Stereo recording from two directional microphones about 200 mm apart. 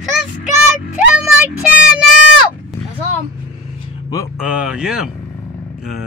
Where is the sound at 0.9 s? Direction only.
5° right (ahead or behind).